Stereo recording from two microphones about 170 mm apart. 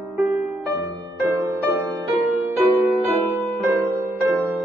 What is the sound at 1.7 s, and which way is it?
Music, 10° right (ahead or behind).